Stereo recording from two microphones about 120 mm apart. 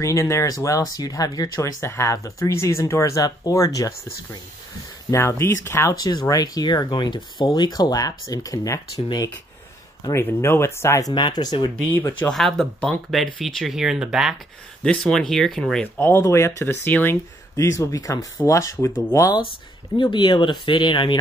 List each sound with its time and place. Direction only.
0.0 s speech: 25° left (ahead or behind)
10.2 s speech: 20° left (ahead or behind); by 11.7 s 35° left (ahead or behind)
12.2 s speech: 5° left (ahead or behind)
14.8 s speech: 5° left (ahead or behind)
16.0 s speech: 20° left (ahead or behind)
20.0 s speech: 40° left (ahead or behind)